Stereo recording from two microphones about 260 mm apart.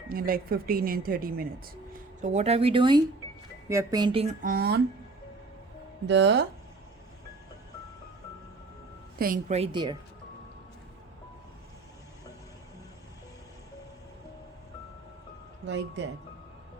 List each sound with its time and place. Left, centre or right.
0.1 s speech: right
6.1 s speech: right
9.1 s speech: right; by 10.0 s centre
15.6 s speech: right